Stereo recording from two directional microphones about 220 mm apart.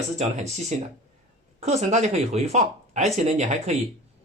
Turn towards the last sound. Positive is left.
turn(degrees=-30)  # may be behind; listen again after turning